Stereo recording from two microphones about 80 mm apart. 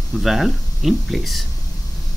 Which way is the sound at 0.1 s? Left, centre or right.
Centre.